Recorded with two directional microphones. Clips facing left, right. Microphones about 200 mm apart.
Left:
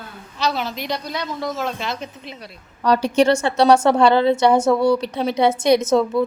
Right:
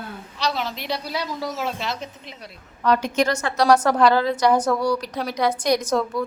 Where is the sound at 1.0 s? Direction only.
10° right (ahead or behind).